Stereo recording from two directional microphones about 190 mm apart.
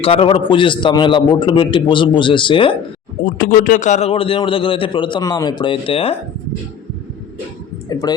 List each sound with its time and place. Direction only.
0.0 s a man's voice: 30° left (ahead or behind)
3.2 s a man's voice: 50° left (ahead or behind); by 6.1 s 30° left (ahead or behind)